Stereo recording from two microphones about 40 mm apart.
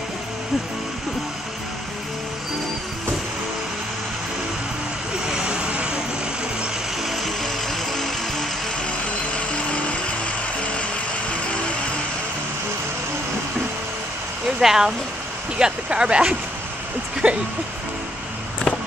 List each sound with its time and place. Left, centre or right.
5.3 s vehicle: right
7.1 s music: centre
14.6 s speech: centre
15.6 s speech: right